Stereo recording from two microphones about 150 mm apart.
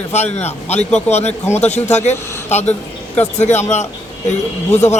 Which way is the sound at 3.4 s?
50° left (ahead or behind).